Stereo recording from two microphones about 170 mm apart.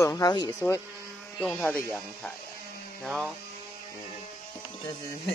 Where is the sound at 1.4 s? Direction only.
5° left (ahead or behind).